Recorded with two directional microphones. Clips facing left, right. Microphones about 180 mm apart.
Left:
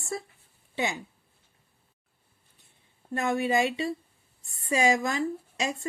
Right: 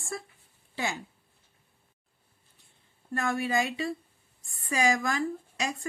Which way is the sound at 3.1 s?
20° left (ahead or behind).